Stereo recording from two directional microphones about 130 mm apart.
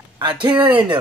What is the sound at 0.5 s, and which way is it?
Speech, 15° right (ahead or behind).